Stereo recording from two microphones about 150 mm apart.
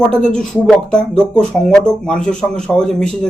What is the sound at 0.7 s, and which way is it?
Speech, 5° left (ahead or behind).